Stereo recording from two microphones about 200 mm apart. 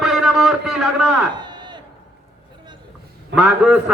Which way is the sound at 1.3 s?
20° right (ahead or behind).